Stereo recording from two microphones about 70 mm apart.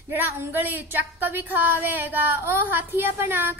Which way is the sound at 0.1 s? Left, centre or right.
Right.